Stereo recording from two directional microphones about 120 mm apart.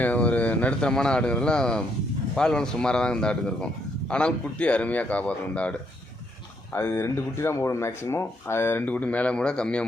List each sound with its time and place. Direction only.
0.0 s speech: 10° left (ahead or behind)
6.7 s speech: 20° left (ahead or behind)